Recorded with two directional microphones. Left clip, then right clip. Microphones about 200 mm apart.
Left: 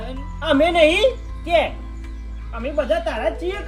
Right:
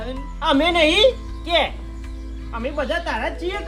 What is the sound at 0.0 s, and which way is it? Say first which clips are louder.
Speech: right 4 dB; 5° right (ahead or behind).